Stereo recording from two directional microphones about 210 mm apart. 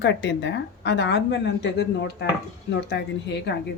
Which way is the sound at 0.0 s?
55° left (ahead or behind).